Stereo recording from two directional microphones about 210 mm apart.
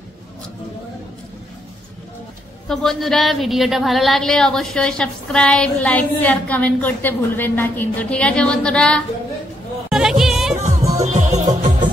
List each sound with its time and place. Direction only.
2.7 s a woman's voice: centre (ahead or behind)
9.8 s music: centre (ahead or behind)
10.9 s music: 35° right (ahead or behind)